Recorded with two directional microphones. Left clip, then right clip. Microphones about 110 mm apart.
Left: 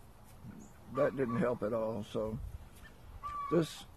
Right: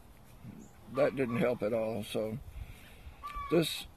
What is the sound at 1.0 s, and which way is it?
Speech, 10° right (ahead or behind).